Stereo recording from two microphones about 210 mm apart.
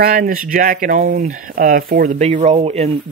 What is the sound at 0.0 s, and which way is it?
Speech, 45° right (ahead or behind).